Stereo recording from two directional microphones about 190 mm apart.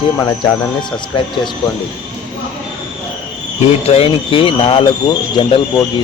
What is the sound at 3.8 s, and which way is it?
Speech, 30° left (ahead or behind).